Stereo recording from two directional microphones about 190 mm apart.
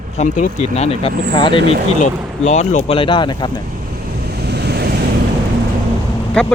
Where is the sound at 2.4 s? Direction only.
35° left (ahead or behind).